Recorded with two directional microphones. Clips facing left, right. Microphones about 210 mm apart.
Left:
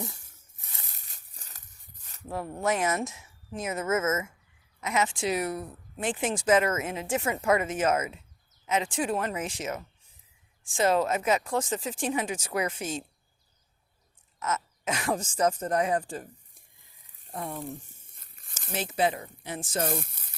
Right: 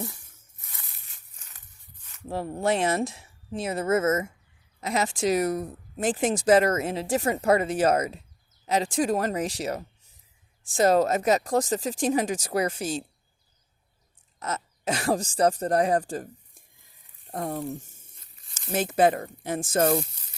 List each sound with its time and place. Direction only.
0.9 s a sound: 40° left (ahead or behind)
2.3 s speech: 30° right (ahead or behind)
14.3 s speech: 35° right (ahead or behind)
18.2 s a sound: 50° left (ahead or behind)
18.7 s speech: 50° right (ahead or behind)
20.1 s sizzle: 55° left (ahead or behind)